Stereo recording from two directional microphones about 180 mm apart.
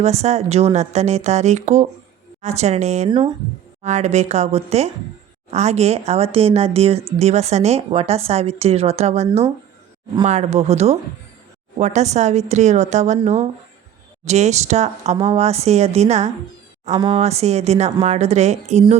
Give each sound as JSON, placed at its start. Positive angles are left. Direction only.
{"t": 0.0, "sound": "speech", "side_deg": -35}